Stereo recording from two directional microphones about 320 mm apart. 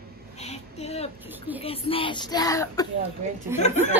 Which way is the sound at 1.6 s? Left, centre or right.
Centre.